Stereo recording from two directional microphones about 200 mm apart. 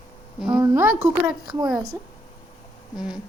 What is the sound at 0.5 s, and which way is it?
Speech, 10° right (ahead or behind).